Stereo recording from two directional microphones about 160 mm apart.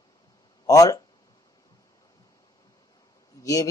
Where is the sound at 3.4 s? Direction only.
20° left (ahead or behind).